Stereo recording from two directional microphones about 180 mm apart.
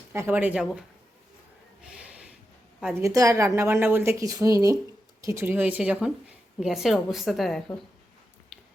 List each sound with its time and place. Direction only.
0.1 s a woman's voice: 10° right (ahead or behind)
3.0 s a woman's voice: 20° right (ahead or behind); by 7.6 s centre (ahead or behind)